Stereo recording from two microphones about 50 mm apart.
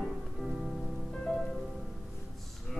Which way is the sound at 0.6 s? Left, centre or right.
Centre.